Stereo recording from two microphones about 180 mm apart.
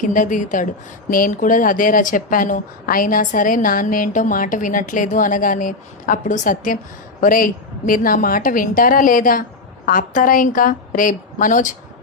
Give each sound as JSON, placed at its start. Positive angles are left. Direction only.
{"t": 0.0, "sound": "a woman's voice", "side_deg": 45}